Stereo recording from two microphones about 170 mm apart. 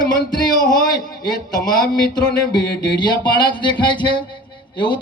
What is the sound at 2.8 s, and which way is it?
A man's voice, 25° left (ahead or behind).